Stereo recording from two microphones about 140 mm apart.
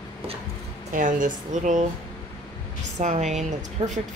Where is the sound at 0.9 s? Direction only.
65° right (ahead or behind).